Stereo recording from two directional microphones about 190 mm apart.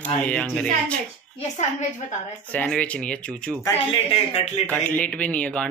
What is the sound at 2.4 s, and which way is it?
Speech, 5° left (ahead or behind).